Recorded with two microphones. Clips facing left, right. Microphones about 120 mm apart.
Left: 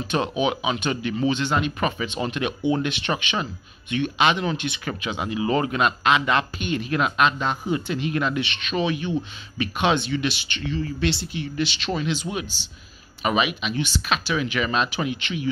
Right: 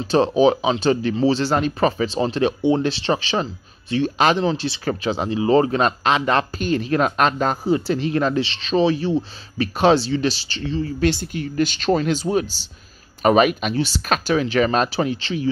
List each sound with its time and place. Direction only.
0.0 s speech: 35° right (ahead or behind)